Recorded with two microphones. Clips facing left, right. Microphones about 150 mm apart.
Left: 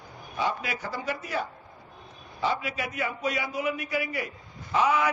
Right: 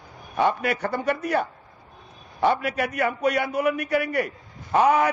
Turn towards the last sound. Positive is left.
turn(degrees=-50)  # may be behind; listen again after turning